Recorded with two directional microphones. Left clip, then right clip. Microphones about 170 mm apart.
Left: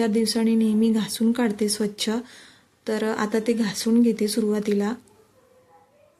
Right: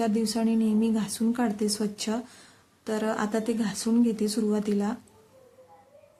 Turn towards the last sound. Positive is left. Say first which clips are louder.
# left 4 dB
turn(degrees=20)  # may be behind; listen again after turning